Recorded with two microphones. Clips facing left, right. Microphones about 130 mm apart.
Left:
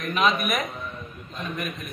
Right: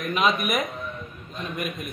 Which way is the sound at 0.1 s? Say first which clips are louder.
Even; 5° right (ahead or behind).